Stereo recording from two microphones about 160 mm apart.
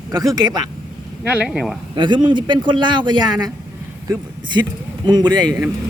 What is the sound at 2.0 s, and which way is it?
A man's voice, 30° right (ahead or behind).